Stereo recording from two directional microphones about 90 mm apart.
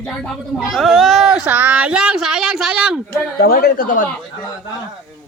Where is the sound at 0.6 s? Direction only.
Centre (ahead or behind).